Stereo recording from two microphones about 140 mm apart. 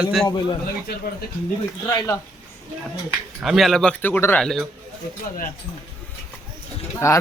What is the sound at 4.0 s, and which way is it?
Speech, 15° left (ahead or behind).